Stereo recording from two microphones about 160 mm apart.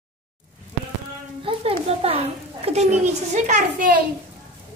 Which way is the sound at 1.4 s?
40° right (ahead or behind).